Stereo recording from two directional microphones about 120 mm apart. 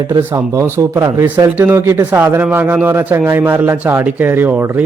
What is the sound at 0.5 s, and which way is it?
Speech, 25° right (ahead or behind).